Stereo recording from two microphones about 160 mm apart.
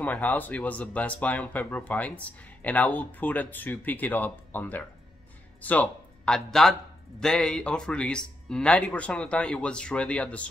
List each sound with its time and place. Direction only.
0.0 s a man's voice: 10° left (ahead or behind)